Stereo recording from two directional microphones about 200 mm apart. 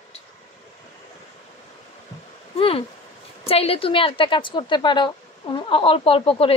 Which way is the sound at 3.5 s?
30° left (ahead or behind).